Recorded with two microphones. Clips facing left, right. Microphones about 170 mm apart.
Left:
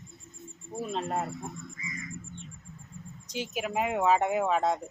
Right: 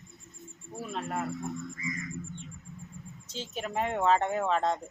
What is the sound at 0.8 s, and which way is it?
Speech, 25° left (ahead or behind).